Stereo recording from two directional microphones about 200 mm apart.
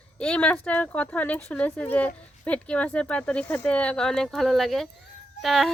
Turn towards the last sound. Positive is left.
turn(degrees=0)  # may be behind; listen again after turning